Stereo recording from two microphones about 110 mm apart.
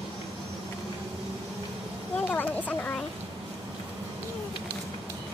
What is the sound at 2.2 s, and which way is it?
Speech, 15° left (ahead or behind).